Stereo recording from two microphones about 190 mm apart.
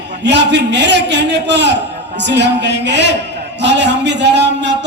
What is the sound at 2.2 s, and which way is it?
A man's voice, 65° right (ahead or behind).